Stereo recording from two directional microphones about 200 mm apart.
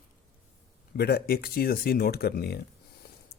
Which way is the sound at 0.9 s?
50° left (ahead or behind).